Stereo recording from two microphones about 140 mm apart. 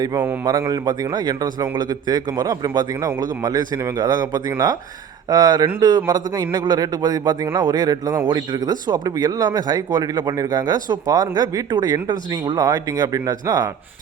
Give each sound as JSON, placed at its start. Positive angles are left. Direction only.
{"t": 0.4, "sound": "speech", "side_deg": -25}